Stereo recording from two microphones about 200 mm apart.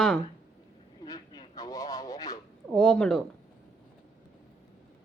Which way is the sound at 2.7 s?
Centre (ahead or behind).